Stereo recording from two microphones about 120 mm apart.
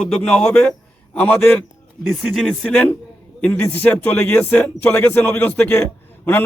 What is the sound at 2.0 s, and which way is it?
A man's voice, centre (ahead or behind).